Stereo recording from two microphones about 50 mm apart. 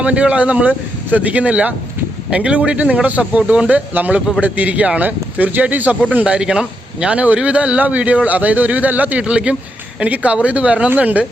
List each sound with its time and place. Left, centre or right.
0.0 s speech: right
6.2 s speech: centre; by 9.2 s right
9.2 s speech: right